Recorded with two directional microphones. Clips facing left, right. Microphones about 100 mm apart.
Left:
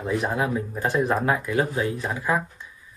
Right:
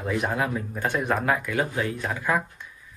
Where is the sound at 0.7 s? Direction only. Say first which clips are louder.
Left 3 dB; 30° left (ahead or behind).